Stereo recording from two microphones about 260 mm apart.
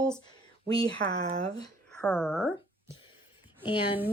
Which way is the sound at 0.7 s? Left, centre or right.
Centre.